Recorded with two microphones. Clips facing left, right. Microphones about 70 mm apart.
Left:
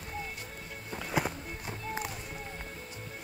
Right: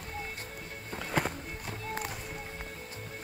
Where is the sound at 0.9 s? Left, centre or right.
Centre.